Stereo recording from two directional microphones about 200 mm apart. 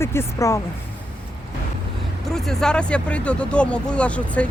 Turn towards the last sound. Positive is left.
turn(degrees=5)  # may be behind; listen again after turning